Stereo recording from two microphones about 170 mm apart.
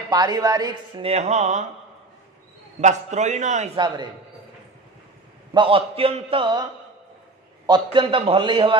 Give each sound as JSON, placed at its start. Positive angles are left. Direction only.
{"t": 0.1, "sound": "speech", "side_deg": -20}
{"t": 2.8, "sound": "a man's voice", "side_deg": -45}
{"t": 3.7, "sound": "speech", "side_deg": -25}
{"t": 5.5, "sound": "a man's voice", "side_deg": -30}
{"t": 7.6, "sound": "speech", "side_deg": -25}